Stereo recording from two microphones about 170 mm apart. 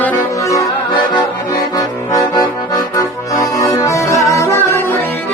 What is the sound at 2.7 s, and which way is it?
Accordion, 20° left (ahead or behind).